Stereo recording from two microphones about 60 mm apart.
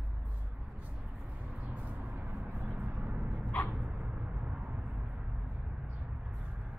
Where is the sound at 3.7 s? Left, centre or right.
Centre.